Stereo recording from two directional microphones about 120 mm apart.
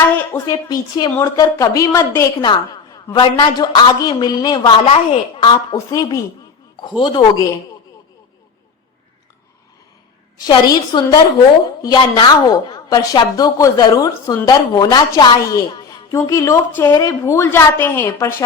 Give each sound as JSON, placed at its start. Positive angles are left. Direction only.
{"t": 0.4, "sound": "a woman's voice", "side_deg": 35}
{"t": 2.4, "sound": "a woman's voice", "side_deg": 35}
{"t": 5.7, "sound": "a woman's voice", "side_deg": 30}
{"t": 10.4, "sound": "a woman's voice", "side_deg": 35}